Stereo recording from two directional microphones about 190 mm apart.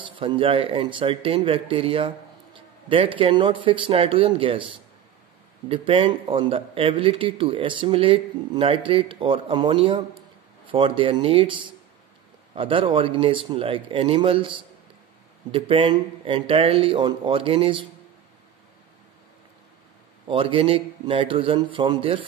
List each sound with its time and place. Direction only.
0.0 s speech: 25° right (ahead or behind)
20.2 s speech: 25° right (ahead or behind)